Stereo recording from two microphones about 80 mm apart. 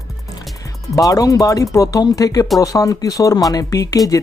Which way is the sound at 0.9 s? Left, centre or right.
Left.